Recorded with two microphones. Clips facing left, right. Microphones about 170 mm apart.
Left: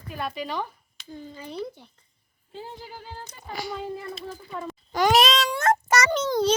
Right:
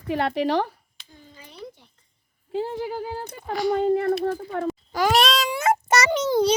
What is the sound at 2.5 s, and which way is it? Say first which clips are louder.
Speech: right 12 dB; 85° right.